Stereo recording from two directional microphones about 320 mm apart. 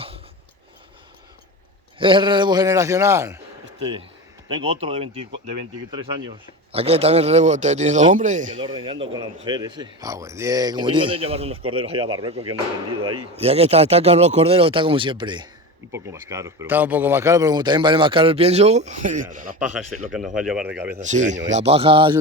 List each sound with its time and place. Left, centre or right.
2.0 s speech: centre
4.4 s a man's voice: centre
13.0 s speech: right
13.3 s speech: centre
20.1 s speech: centre
21.0 s a man's voice: right